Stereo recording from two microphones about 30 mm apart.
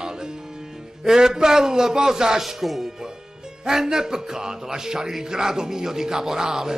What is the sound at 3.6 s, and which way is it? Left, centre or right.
Speech, centre.